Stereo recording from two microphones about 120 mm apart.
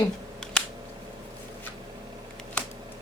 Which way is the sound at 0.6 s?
5° left (ahead or behind).